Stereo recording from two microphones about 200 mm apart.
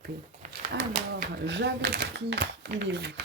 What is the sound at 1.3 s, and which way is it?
Speech, 60° right (ahead or behind).